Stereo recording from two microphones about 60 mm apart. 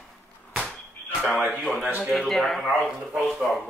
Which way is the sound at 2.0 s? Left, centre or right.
Centre.